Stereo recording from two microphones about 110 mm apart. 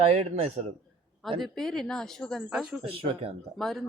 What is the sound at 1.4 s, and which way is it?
Speech, 5° left (ahead or behind).